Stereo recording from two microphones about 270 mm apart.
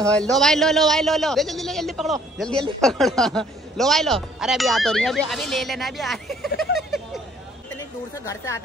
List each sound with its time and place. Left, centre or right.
0.0 s a man's voice: centre